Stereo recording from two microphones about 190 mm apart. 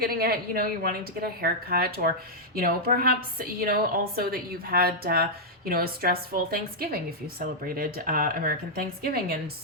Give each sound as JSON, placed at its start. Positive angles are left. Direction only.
{"t": 0.0, "sound": "a woman's voice", "side_deg": -50}